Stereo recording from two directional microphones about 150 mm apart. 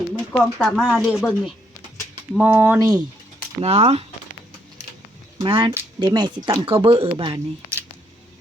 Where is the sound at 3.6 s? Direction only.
45° right (ahead or behind).